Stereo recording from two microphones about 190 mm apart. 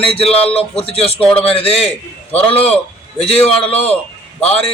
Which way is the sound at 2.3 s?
10° left (ahead or behind).